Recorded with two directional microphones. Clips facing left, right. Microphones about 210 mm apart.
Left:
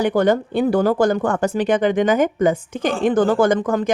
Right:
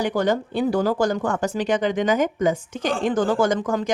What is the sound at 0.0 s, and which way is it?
Speech, 55° left (ahead or behind).